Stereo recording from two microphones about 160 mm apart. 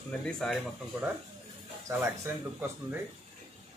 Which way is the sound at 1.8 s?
15° right (ahead or behind).